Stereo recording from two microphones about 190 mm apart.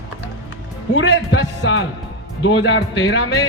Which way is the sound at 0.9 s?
80° left.